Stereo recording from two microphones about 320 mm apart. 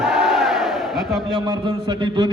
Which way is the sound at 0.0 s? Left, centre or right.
Centre.